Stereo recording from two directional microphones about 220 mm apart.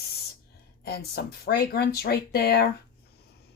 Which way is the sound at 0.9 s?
45° left (ahead or behind).